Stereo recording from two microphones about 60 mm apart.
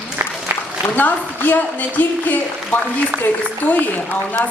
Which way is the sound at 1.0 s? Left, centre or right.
Left.